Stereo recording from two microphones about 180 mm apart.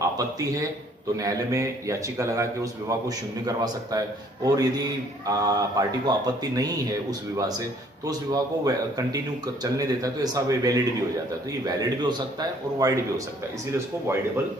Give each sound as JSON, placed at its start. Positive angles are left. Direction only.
{"t": 1.1, "sound": "a man's voice", "side_deg": -20}